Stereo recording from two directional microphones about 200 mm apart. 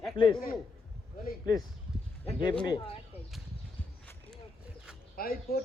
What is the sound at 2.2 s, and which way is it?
Speech, 25° left (ahead or behind).